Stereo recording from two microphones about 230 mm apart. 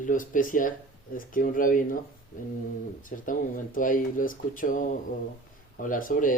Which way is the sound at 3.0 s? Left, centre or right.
Left.